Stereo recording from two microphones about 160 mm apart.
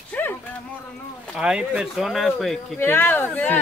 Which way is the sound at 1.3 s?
5° right (ahead or behind).